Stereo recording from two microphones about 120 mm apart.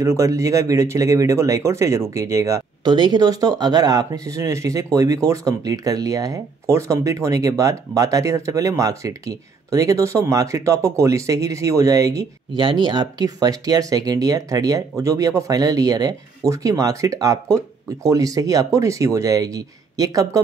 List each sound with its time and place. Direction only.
0.0 s speech: 25° right (ahead or behind)
12.5 s speech: 40° right (ahead or behind)